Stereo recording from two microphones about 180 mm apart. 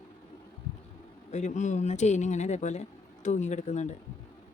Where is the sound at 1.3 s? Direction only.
40° left (ahead or behind).